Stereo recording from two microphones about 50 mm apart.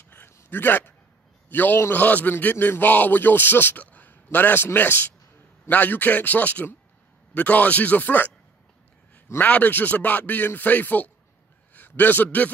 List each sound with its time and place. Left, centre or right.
0.5 s speech: left
3.8 s a sound: left
4.7 s speech: left
9.4 s a man's voice: left